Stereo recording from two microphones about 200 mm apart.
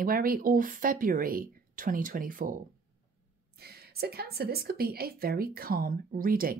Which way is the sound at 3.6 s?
50° right (ahead or behind).